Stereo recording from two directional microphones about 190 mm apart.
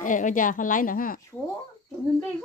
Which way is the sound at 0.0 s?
45° left (ahead or behind).